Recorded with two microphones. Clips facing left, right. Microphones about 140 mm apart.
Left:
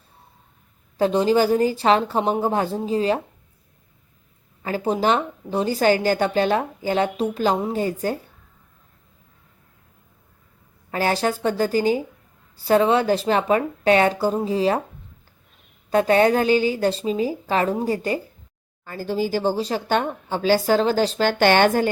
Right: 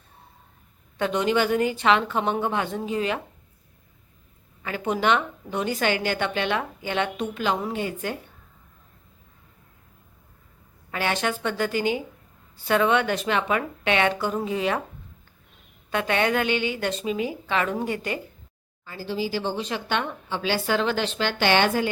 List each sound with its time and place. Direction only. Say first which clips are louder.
0.9 s a woman's voice: left 5 dB; 35° left (ahead or behind)
4.6 s a woman's voice: left 3 dB; 35° left (ahead or behind)
10.9 s a woman's voice: left 4 dB; 35° left (ahead or behind)
15.9 s a woman's voice: left 7 dB; 35° left (ahead or behind)
18.9 s speech: left 5 dB; 50° left (ahead or behind)